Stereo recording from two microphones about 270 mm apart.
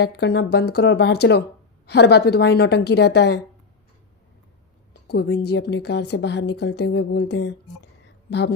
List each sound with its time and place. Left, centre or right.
0.0 s a woman's voice: left
5.0 s a woman's voice: left